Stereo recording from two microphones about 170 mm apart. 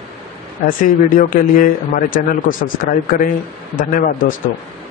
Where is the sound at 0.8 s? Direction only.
50° left (ahead or behind).